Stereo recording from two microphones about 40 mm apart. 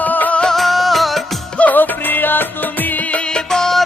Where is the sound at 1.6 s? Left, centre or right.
Left.